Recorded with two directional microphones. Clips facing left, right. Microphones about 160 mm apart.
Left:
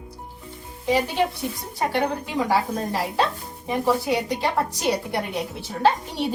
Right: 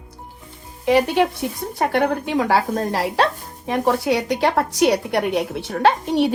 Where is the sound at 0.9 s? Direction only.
70° right (ahead or behind).